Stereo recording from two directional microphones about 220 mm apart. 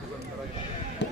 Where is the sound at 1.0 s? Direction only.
50° left (ahead or behind).